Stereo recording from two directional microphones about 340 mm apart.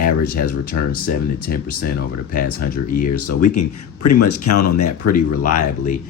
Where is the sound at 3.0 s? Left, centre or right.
Left.